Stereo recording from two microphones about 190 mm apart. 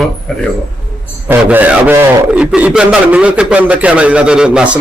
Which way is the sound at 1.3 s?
10° right (ahead or behind).